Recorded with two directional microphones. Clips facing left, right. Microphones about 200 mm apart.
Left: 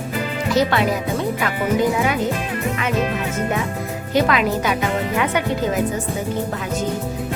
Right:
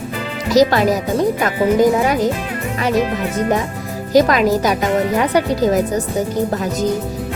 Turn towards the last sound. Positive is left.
turn(degrees=-40)  # may be behind; listen again after turning